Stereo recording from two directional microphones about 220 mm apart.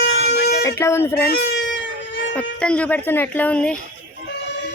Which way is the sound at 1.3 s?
50° left (ahead or behind).